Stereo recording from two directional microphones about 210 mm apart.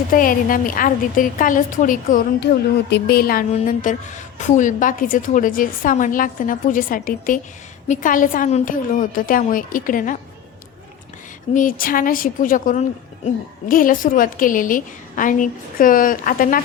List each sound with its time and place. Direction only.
0.1 s a woman's voice: 40° left (ahead or behind)
11.5 s a woman's voice: 40° left (ahead or behind)